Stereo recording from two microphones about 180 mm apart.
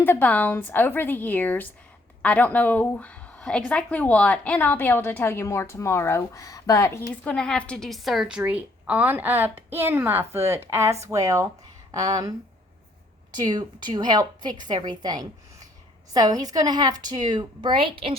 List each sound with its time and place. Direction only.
0.0 s a woman's voice: 10° left (ahead or behind); by 12.3 s 20° right (ahead or behind)
13.3 s a woman's voice: 25° right (ahead or behind)